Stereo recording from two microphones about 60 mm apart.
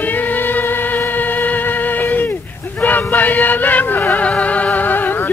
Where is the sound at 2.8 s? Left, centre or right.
Left.